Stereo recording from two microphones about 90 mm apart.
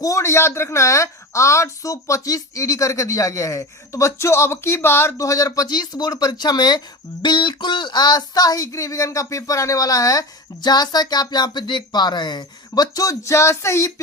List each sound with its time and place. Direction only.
0.0 s speech: 35° left (ahead or behind)